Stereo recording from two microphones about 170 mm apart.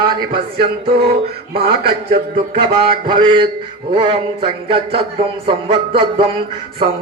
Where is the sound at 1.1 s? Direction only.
65° right (ahead or behind).